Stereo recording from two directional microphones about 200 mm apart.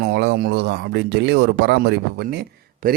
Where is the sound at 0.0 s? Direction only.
55° right (ahead or behind).